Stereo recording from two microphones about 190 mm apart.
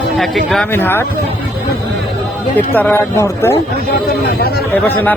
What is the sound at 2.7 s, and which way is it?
Speech, 10° left (ahead or behind).